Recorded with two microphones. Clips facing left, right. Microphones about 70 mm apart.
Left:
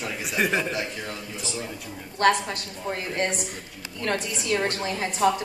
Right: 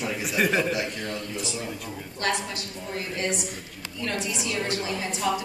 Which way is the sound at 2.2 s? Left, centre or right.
Left.